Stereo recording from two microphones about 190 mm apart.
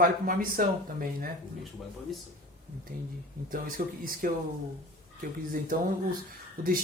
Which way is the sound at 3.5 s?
45° right (ahead or behind).